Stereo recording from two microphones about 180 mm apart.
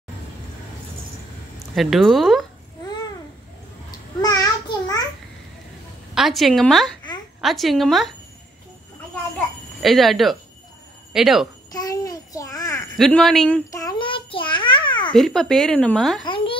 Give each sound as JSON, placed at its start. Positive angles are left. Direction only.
{"t": 1.8, "sound": "speech", "side_deg": 0}
{"t": 4.2, "sound": "child singing", "side_deg": 20}
{"t": 6.1, "sound": "speech", "side_deg": 0}
{"t": 9.8, "sound": "speech", "side_deg": 0}
{"t": 11.7, "sound": "a sound", "side_deg": 20}
{"t": 12.9, "sound": "speech", "side_deg": 0}
{"t": 13.7, "sound": "a sound", "side_deg": 20}
{"t": 15.1, "sound": "speech", "side_deg": 0}
{"t": 16.3, "sound": "a sound", "side_deg": 30}